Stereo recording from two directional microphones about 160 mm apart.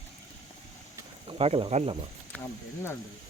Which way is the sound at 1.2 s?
40° right (ahead or behind).